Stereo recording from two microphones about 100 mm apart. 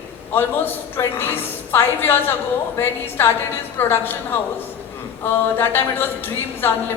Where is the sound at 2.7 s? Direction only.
25° left (ahead or behind).